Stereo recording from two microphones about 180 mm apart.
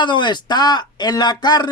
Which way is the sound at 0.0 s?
25° left (ahead or behind).